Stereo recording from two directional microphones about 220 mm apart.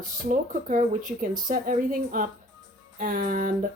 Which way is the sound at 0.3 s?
35° right (ahead or behind).